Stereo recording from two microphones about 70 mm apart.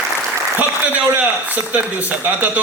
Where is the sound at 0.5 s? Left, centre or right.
Right.